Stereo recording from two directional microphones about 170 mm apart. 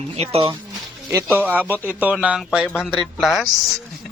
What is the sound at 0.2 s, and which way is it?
Speech, 35° right (ahead or behind).